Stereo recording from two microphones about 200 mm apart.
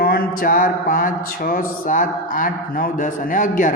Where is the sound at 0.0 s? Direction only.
45° left (ahead or behind).